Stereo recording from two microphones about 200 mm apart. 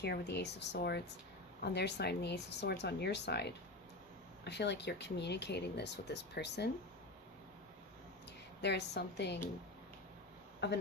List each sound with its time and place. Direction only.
0.0 s speech: 55° left (ahead or behind)
8.6 s speech: 55° left (ahead or behind)